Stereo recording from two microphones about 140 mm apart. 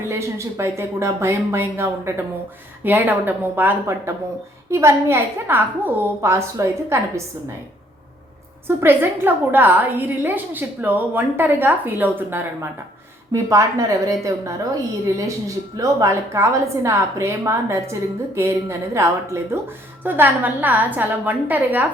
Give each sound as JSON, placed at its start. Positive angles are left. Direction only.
{"t": 0.1, "sound": "a woman's voice", "side_deg": -20}
{"t": 8.6, "sound": "a woman's voice", "side_deg": -15}